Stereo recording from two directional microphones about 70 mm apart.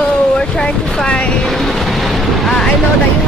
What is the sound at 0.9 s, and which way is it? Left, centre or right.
Boat, centre.